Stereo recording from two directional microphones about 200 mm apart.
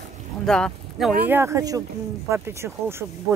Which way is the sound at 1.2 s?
10° right (ahead or behind).